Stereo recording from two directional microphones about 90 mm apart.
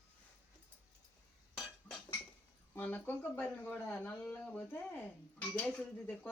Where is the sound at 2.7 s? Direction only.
20° left (ahead or behind).